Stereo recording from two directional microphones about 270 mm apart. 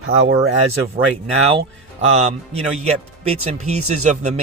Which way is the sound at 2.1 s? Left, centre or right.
Right.